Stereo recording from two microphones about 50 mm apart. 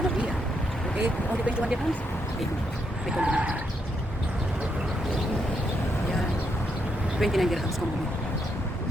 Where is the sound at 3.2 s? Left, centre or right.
Right.